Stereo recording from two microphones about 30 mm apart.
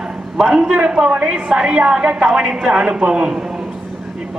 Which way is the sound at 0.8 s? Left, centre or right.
Right.